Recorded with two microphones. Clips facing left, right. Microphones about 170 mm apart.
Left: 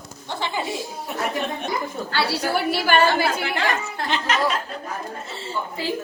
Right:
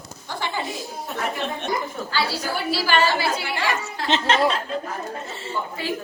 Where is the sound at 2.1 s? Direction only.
65° left (ahead or behind).